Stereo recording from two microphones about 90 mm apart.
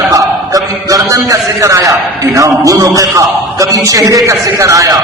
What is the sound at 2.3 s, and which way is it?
A man's voice, 35° right (ahead or behind).